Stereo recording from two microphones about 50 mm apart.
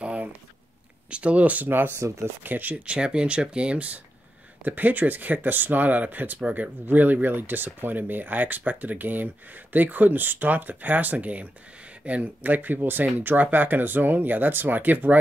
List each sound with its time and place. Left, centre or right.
0.0 s a sound: right
1.1 s speech: right
1.7 s speech: right
2.0 s speech: right
2.4 s speech: right
2.9 s speech: centre; by 15.1 s right